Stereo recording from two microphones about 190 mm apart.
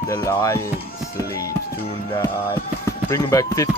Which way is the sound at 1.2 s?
15° left (ahead or behind).